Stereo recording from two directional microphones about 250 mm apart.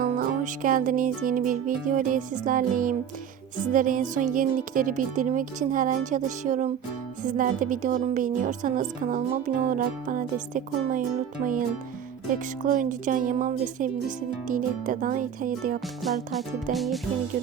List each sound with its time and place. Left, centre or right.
0.0 s a woman's voice: right
12.3 s a woman's voice: right
16.7 s music: centre